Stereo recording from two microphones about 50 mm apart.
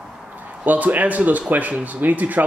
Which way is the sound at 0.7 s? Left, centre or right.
Right.